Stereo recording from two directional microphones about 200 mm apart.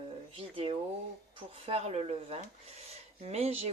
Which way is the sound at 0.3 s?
25° right (ahead or behind).